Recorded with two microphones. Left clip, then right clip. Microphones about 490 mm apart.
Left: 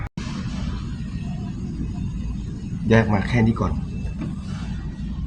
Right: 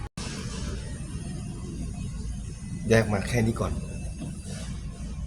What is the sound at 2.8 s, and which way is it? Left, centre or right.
Speech, right.